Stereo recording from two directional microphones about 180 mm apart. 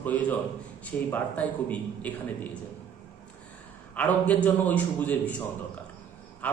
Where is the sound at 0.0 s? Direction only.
10° left (ahead or behind).